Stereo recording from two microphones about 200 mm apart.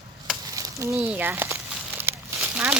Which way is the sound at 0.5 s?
15° right (ahead or behind).